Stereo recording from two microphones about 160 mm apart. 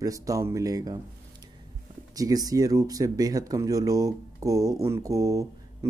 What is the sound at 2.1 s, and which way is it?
Speech, 20° right (ahead or behind).